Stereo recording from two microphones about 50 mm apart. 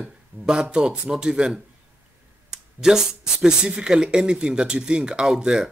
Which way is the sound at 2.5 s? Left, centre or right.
Centre.